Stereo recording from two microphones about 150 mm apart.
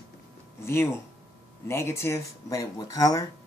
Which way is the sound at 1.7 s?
15° left (ahead or behind).